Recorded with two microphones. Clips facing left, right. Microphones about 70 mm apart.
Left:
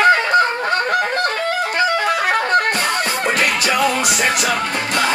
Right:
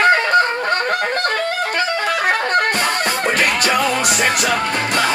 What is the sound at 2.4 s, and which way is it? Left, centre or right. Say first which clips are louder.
Music: even; right.